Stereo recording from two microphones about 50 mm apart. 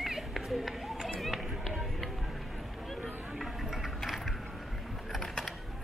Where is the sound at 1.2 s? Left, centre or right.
Centre.